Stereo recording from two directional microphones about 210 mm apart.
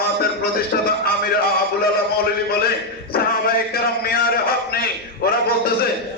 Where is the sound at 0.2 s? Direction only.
45° left (ahead or behind).